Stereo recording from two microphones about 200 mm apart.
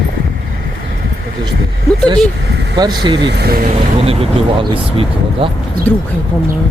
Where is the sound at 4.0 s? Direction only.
30° right (ahead or behind).